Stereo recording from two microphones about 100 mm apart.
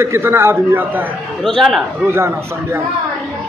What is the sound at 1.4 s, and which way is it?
Speech, 5° left (ahead or behind).